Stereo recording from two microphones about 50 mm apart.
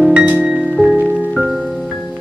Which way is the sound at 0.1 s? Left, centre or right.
Right.